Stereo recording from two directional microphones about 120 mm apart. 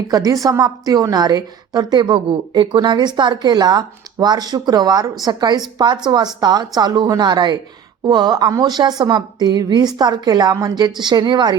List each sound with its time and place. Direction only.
0.1 s a woman's voice: 30° right (ahead or behind)